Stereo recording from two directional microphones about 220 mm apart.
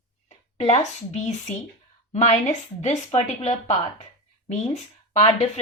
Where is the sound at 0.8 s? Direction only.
30° left (ahead or behind).